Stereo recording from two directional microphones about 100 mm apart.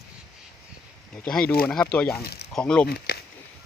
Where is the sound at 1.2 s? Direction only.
10° left (ahead or behind).